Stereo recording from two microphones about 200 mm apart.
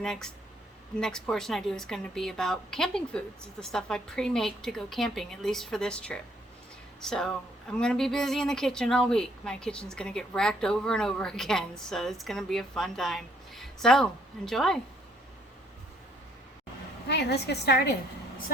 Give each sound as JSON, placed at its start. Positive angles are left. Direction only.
{"t": 0.0, "sound": "speech", "side_deg": 0}
{"t": 17.1, "sound": "a woman's voice", "side_deg": 55}